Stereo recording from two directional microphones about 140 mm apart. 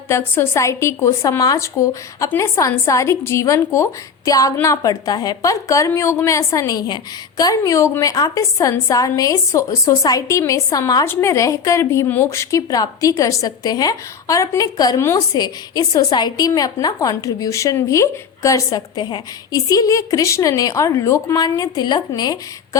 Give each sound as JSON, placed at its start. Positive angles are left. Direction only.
{"t": 0.1, "sound": "a woman's voice", "side_deg": 15}